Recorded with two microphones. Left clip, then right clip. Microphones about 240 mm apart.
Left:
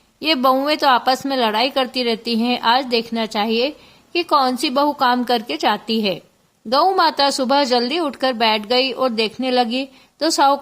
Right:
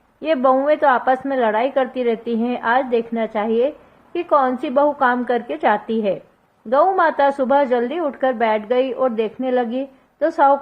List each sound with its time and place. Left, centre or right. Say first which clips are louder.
0.2 s a woman's voice: even; left